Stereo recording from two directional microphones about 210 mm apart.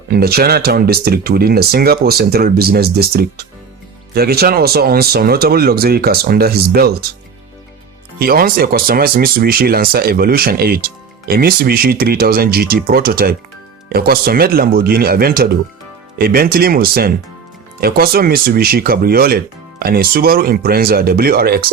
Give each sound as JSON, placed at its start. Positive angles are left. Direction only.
{"t": 0.1, "sound": "speech", "side_deg": -45}
{"t": 8.2, "sound": "speech", "side_deg": -45}